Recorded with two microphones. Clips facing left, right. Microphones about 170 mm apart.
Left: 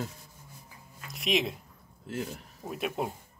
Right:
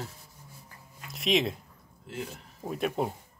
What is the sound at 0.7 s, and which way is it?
Music, centre (ahead or behind).